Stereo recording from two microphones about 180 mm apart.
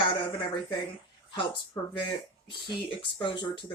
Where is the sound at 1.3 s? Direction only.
25° left (ahead or behind).